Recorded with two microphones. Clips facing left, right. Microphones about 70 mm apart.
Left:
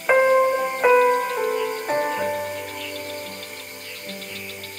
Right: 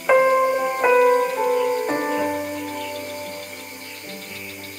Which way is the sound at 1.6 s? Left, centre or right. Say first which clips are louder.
Right 3 dB; centre.